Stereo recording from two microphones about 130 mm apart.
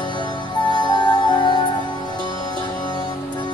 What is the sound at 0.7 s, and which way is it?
Music, 35° left (ahead or behind).